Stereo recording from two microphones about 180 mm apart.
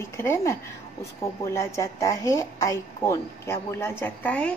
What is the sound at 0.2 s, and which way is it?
A woman's voice, 15° left (ahead or behind).